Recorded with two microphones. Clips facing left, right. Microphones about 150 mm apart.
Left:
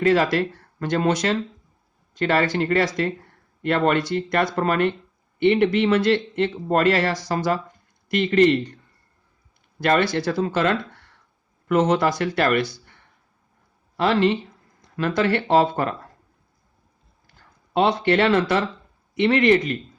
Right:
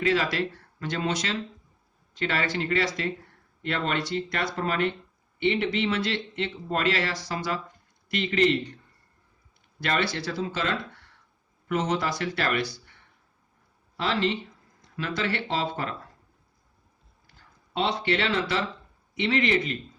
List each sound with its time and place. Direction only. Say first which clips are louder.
0.0 s speech: left 7 dB; 45° left (ahead or behind)
9.8 s speech: left 8 dB; 50° left (ahead or behind)
13.9 s speech: left 7 dB; 50° left (ahead or behind)
17.7 s speech: left 8 dB; 50° left (ahead or behind)